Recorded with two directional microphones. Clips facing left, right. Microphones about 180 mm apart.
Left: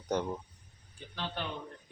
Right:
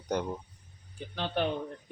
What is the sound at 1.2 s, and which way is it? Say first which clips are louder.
Speech: right 7 dB; 55° right (ahead or behind).